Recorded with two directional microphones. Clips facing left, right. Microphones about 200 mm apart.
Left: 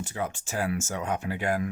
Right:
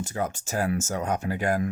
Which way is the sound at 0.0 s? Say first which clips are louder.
Right 3 dB; 40° right (ahead or behind).